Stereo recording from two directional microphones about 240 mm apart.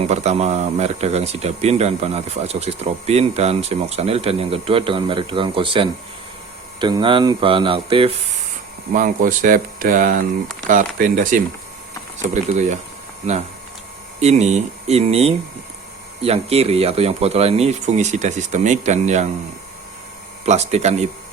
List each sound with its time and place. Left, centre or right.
0.0 s speech: right
8.9 s speech: right
20.4 s speech: right